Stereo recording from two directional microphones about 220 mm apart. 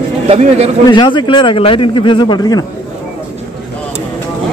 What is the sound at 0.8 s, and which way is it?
Speech, 20° left (ahead or behind).